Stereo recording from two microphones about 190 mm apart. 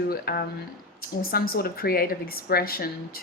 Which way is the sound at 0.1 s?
55° left (ahead or behind).